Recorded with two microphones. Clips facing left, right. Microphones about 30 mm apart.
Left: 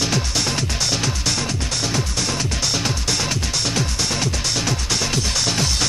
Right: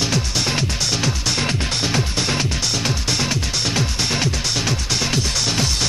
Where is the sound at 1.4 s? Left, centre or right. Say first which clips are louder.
Right 3 dB; right.